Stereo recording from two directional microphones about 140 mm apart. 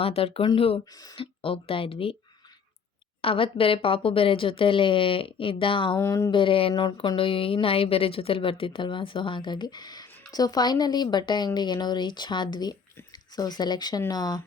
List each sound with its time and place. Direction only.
0.0 s speech: 40° left (ahead or behind)
3.2 s speech: 40° left (ahead or behind)
6.0 s speech: 20° left (ahead or behind)
6.3 s speech: 40° left (ahead or behind)